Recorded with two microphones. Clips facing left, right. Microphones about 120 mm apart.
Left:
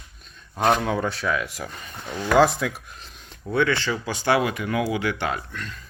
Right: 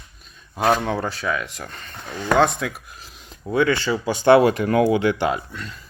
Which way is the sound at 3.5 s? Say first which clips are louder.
Right 3 dB; 15° right (ahead or behind).